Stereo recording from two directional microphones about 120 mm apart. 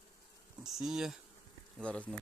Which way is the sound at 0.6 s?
5° right (ahead or behind).